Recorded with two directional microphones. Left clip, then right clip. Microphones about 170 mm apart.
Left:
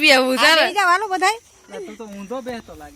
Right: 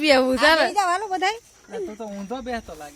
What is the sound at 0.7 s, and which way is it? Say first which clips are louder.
Speech: left 5 dB; 45° left (ahead or behind).